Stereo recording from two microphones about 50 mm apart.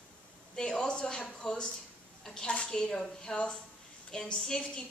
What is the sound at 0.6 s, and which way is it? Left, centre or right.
A woman's voice, centre.